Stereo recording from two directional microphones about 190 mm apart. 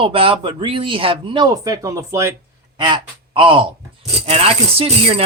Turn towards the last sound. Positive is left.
turn(degrees=-30)  # may be behind; listen again after turning